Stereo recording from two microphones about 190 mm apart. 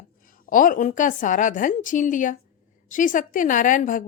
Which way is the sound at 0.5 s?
45° left (ahead or behind).